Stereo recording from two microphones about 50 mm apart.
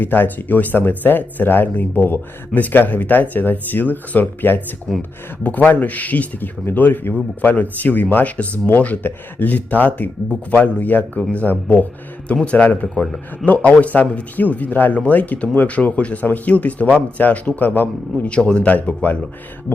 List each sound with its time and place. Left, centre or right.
0.0 s speech: left
4.9 s speech: centre
5.4 s speech: left
13.4 s speech: left
18.3 s speech: centre
18.7 s speech: left